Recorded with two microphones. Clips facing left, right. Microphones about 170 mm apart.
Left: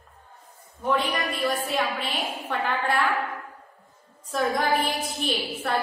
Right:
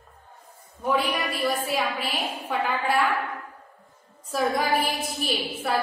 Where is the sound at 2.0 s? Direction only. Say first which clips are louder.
Even; 5° right (ahead or behind).